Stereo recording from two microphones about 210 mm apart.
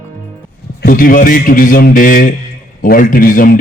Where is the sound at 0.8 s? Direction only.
40° left (ahead or behind).